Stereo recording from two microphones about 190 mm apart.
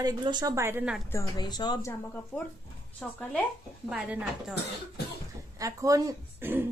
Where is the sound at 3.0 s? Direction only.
5° left (ahead or behind).